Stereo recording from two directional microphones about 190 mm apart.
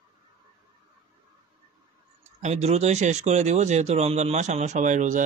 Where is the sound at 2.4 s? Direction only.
35° right (ahead or behind).